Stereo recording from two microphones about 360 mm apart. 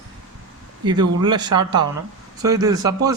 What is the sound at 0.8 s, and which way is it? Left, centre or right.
Speech, centre.